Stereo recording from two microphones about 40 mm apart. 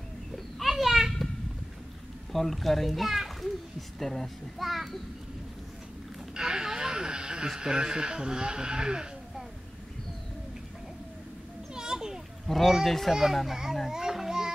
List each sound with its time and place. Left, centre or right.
0.6 s children playing: centre
2.3 s a child's voice: centre
6.3 s a sound: centre
7.4 s speech: centre
11.7 s children playing: centre
12.4 s a child's voice: centre
13.8 s a sound: centre